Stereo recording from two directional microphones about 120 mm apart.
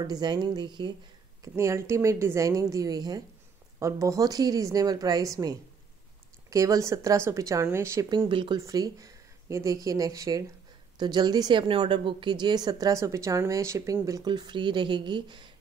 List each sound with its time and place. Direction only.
0.0 s a woman's voice: 35° right (ahead or behind)
1.4 s a woman's voice: 25° right (ahead or behind)
8.3 s speech: 45° right (ahead or behind)
8.5 s a woman's voice: 30° right (ahead or behind)
14.2 s a woman's voice: 40° right (ahead or behind)